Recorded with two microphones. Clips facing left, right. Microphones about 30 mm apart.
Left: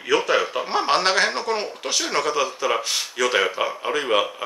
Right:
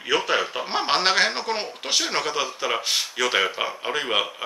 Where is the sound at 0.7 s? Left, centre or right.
Centre.